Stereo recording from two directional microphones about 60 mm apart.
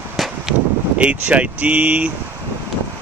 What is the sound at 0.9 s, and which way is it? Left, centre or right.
Speech, right.